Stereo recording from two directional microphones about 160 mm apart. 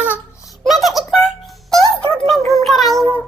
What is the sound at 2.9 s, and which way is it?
Child singing, 20° right (ahead or behind).